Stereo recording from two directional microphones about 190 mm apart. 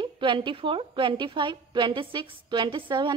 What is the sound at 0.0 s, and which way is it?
A woman's voice, 25° right (ahead or behind).